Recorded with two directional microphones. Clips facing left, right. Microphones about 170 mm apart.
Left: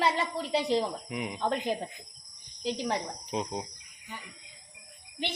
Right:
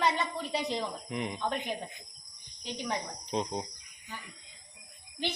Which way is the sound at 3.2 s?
10° left (ahead or behind).